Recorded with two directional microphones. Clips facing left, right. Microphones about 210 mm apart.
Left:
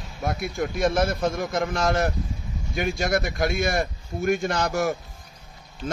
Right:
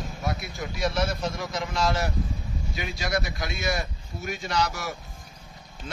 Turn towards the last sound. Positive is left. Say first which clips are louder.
# left 4 dB
turn(degrees=50)  # may be behind; listen again after turning